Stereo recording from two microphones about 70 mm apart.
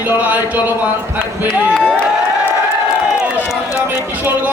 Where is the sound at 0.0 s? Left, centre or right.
Right.